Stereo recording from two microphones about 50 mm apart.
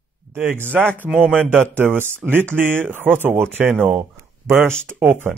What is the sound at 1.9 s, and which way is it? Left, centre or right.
Speech, right.